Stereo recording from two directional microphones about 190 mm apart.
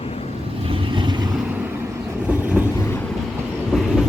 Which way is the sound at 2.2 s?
10° right (ahead or behind).